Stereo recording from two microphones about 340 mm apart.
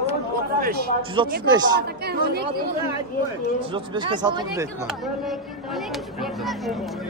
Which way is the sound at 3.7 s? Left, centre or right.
Centre.